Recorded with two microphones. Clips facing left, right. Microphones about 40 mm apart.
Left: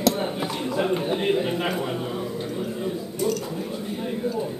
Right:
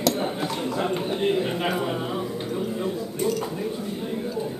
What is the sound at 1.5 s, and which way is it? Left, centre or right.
Speech, centre.